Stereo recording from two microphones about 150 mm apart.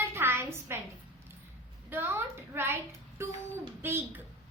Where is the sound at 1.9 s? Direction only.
15° right (ahead or behind).